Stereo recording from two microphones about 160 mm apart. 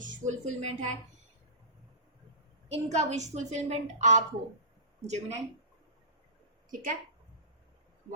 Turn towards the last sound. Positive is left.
turn(degrees=-55)  # may be behind; listen again after turning